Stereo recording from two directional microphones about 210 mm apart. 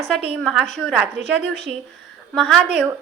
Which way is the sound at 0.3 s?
Centre (ahead or behind).